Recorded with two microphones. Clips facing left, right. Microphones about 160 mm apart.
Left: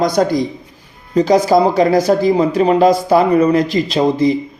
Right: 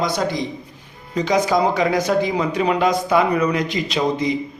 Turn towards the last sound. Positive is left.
turn(degrees=35)  # may be behind; listen again after turning